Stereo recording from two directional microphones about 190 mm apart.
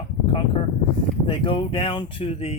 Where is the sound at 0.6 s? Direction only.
30° left (ahead or behind).